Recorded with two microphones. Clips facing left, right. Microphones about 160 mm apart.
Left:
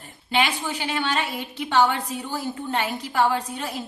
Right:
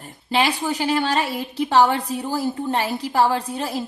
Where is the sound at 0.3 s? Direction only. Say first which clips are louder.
Right 3 dB; 35° right (ahead or behind).